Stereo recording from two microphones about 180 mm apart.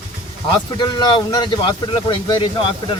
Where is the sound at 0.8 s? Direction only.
25° left (ahead or behind).